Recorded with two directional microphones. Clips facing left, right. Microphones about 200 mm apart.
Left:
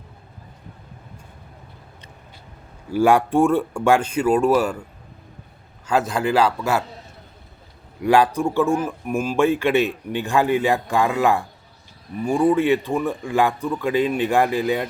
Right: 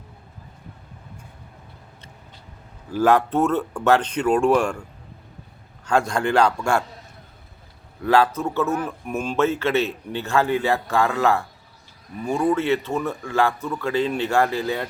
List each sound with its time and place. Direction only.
2.9 s a man's voice: 10° left (ahead or behind)
8.0 s speech: 15° left (ahead or behind)